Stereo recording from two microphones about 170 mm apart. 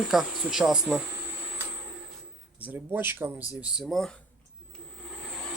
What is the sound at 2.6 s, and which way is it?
Speech, 10° right (ahead or behind).